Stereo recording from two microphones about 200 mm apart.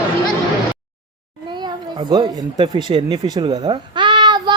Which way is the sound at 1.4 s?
20° right (ahead or behind).